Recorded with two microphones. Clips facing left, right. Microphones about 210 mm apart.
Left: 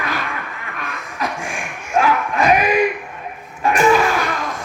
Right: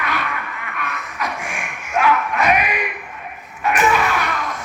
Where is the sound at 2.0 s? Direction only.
30° left (ahead or behind).